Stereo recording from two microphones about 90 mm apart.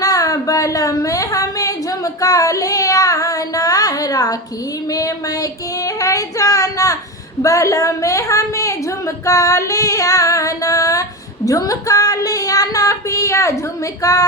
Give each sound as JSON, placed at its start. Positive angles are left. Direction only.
{"t": 0.0, "sound": "a woman's voice", "side_deg": 40}
{"t": 11.4, "sound": "child singing", "side_deg": 40}
{"t": 14.0, "sound": "a woman's voice", "side_deg": 40}